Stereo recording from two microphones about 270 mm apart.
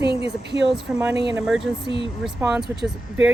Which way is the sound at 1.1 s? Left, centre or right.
Centre.